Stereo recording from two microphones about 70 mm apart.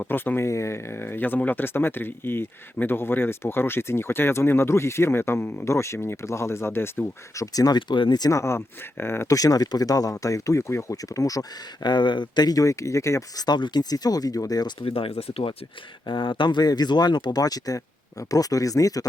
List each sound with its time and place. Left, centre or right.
0.1 s speech: left
0.4 s speech: left
7.3 s speech: left
8.3 s speech: left
9.3 s speech: left
10.9 s speech: left
11.8 s speech: left
13.3 s speech: left
16.5 s speech: left